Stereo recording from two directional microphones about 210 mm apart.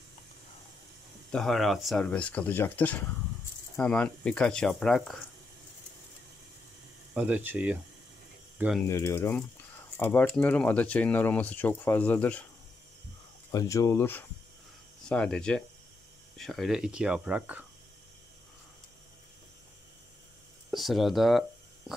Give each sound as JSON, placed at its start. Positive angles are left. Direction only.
{"t": 1.3, "sound": "speech", "side_deg": 0}
{"t": 7.2, "sound": "speech", "side_deg": -5}
{"t": 8.8, "sound": "speech", "side_deg": 15}
{"t": 13.5, "sound": "speech", "side_deg": 15}
{"t": 20.7, "sound": "speech", "side_deg": 0}